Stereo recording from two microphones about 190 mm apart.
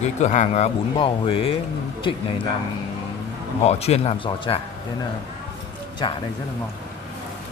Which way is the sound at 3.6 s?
35° left (ahead or behind).